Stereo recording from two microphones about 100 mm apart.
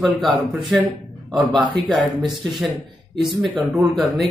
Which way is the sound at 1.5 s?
55° right (ahead or behind).